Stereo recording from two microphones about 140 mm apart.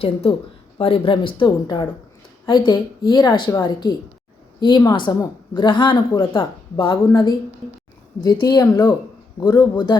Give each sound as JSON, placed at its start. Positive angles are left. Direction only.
{"t": 0.0, "sound": "a woman's voice", "side_deg": 45}